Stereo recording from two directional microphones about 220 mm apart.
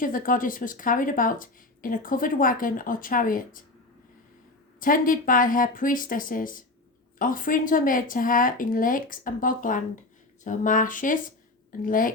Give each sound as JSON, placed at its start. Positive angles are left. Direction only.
{"t": 0.0, "sound": "a woman's voice", "side_deg": 40}
{"t": 4.8, "sound": "a woman's voice", "side_deg": 40}